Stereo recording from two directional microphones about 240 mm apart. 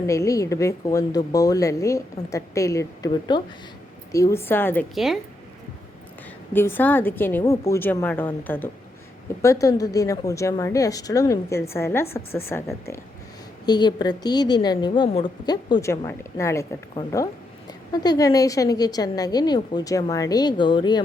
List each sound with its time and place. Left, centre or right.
0.1 s a woman's voice: centre
6.5 s a woman's voice: centre